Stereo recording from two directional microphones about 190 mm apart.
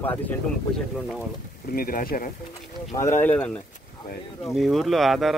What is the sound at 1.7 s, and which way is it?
Speech, 50° left (ahead or behind).